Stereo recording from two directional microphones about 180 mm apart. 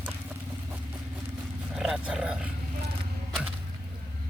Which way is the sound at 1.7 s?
5° right (ahead or behind).